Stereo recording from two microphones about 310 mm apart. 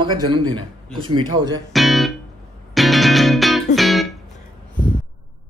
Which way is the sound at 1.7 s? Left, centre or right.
Centre.